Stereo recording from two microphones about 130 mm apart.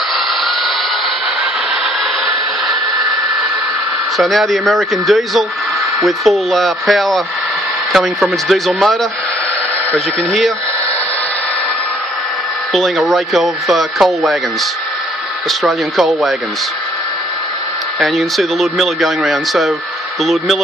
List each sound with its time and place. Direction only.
4.2 s speech: centre (ahead or behind)
12.7 s speech: centre (ahead or behind)
15.6 s speech: centre (ahead or behind)
17.9 s speech: centre (ahead or behind)